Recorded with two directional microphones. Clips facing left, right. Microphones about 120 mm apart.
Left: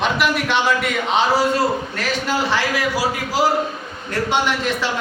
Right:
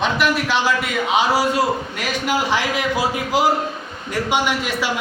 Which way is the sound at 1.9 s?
15° right (ahead or behind).